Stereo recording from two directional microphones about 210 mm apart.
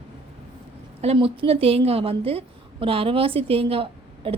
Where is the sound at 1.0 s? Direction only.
25° right (ahead or behind).